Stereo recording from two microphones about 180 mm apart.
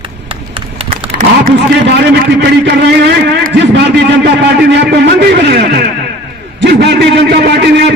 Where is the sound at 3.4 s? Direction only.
70° right (ahead or behind).